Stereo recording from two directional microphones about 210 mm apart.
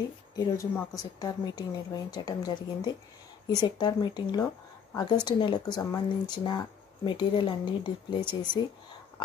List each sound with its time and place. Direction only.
0.4 s speech: 15° left (ahead or behind)